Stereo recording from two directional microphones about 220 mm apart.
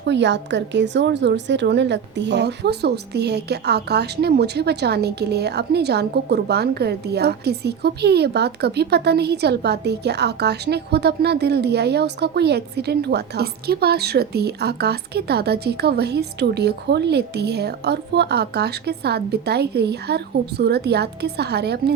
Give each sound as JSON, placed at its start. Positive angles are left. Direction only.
{"t": 0.0, "sound": "a woman's voice", "side_deg": -50}